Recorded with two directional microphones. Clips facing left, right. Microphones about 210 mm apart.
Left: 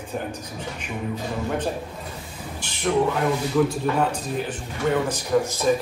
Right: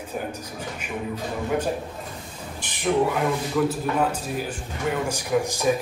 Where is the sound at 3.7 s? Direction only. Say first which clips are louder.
Left 1 dB; 5° right (ahead or behind).